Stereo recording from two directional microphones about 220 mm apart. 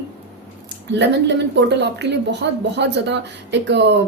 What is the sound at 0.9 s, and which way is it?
A woman's voice, 50° right (ahead or behind).